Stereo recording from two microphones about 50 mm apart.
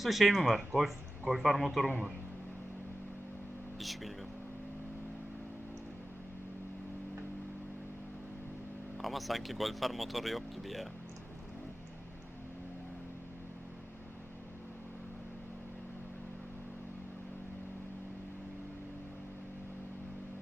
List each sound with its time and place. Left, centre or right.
0.0 s speech: centre
3.8 s speech: centre
9.0 s speech: centre